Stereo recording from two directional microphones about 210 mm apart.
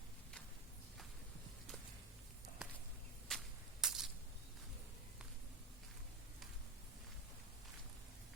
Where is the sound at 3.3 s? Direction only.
Centre (ahead or behind).